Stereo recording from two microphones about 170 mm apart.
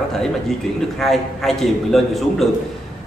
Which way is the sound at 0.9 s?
Centre (ahead or behind).